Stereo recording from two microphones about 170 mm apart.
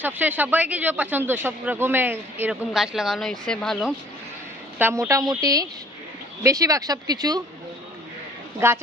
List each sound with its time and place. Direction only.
0.0 s speech: 10° right (ahead or behind)
4.7 s a woman's voice: 15° right (ahead or behind)
8.5 s speech: 15° right (ahead or behind)